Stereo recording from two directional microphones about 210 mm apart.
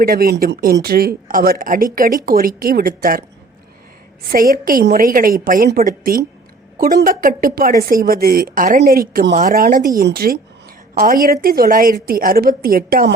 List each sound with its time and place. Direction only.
0.0 s a woman's voice: 45° right (ahead or behind)
4.3 s a woman's voice: 45° right (ahead or behind)